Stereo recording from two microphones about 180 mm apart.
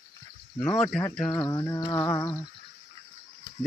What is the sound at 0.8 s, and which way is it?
Speech, centre (ahead or behind).